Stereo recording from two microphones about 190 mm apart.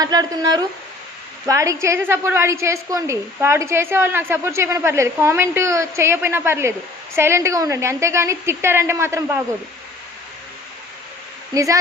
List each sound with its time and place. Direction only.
0.0 s a woman's voice: 20° right (ahead or behind)
11.5 s a woman's voice: 15° right (ahead or behind)